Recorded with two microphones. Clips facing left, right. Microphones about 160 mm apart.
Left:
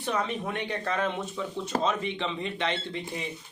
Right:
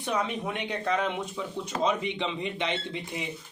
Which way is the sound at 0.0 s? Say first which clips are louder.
Even; 15° right (ahead or behind).